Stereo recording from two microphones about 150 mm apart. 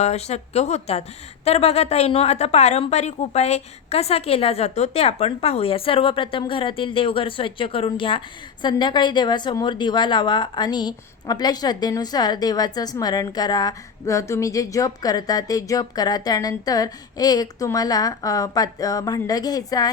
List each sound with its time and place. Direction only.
0.0 s a woman's voice: 45° left (ahead or behind); by 19.9 s 25° left (ahead or behind)